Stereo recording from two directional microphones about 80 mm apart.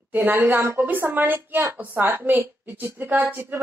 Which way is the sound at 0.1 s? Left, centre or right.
Right.